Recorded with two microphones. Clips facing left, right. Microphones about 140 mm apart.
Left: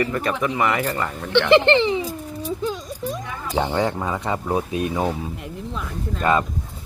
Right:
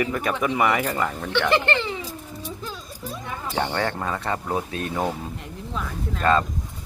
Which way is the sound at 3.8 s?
15° left (ahead or behind).